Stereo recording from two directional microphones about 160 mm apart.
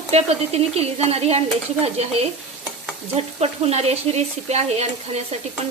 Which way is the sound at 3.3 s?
40° right (ahead or behind).